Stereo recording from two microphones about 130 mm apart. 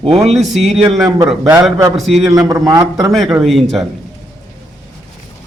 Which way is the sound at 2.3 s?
25° right (ahead or behind).